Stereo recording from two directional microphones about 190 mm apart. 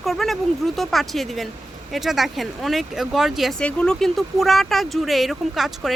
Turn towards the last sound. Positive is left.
turn(degrees=0)  # may be behind; listen again after turning